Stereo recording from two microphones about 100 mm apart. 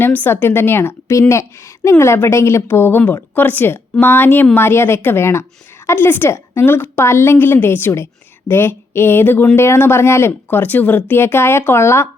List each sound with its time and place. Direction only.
0.0 s a woman's voice: 20° left (ahead or behind)